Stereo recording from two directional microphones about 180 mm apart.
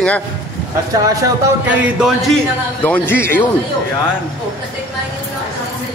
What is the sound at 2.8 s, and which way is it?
Speech, 10° left (ahead or behind).